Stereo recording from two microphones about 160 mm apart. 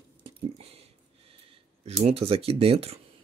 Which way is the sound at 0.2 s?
40° right (ahead or behind).